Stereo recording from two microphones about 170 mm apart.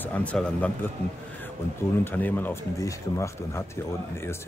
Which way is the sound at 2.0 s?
10° left (ahead or behind).